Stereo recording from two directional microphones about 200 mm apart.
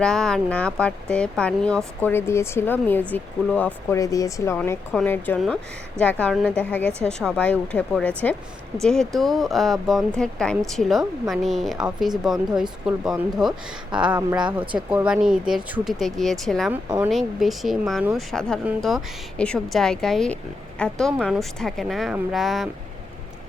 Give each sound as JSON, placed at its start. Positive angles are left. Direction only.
{"t": 0.0, "sound": "a woman's voice", "side_deg": 5}
{"t": 14.6, "sound": "speech", "side_deg": -25}
{"t": 14.8, "sound": "a woman's voice", "side_deg": -5}
{"t": 16.7, "sound": "speech", "side_deg": -10}
{"t": 17.1, "sound": "a woman's voice", "side_deg": 0}